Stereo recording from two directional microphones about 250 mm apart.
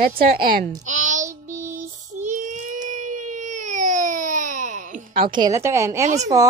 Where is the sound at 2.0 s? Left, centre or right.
Right.